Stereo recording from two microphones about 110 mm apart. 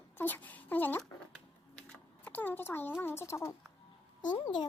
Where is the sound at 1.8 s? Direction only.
15° left (ahead or behind).